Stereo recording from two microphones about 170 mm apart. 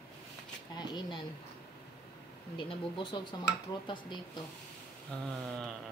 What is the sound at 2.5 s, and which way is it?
Speech, 30° left (ahead or behind).